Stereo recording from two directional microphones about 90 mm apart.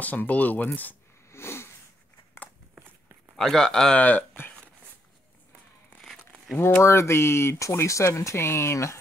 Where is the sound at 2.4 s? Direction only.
25° left (ahead or behind).